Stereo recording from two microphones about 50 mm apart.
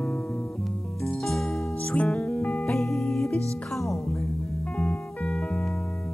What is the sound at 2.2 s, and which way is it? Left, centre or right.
Music, left.